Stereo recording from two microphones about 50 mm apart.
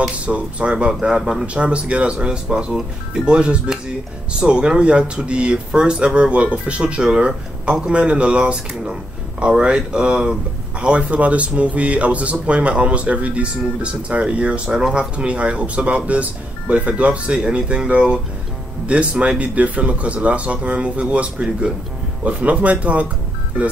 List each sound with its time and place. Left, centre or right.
0.2 s speech: right